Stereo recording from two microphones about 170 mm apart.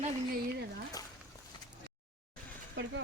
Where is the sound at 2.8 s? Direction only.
90° right.